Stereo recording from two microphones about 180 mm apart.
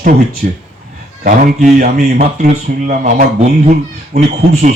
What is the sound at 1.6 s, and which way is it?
Speech, 55° right (ahead or behind).